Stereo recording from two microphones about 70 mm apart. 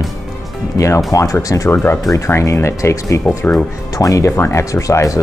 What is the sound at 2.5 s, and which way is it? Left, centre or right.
Speech, left.